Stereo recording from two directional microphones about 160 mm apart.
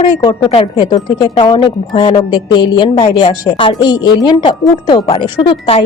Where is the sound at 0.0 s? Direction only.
25° left (ahead or behind).